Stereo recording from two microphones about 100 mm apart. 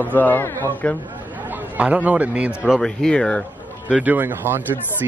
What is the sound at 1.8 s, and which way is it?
Speech, 15° right (ahead or behind).